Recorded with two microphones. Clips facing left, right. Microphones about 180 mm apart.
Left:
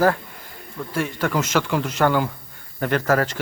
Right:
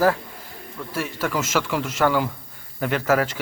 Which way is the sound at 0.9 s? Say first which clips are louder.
Left 2 dB; 5° right (ahead or behind).